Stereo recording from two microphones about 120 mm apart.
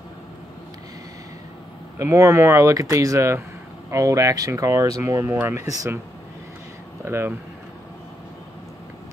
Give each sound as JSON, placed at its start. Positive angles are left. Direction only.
{"t": 2.0, "sound": "speech", "side_deg": -25}
{"t": 7.1, "sound": "speech", "side_deg": -20}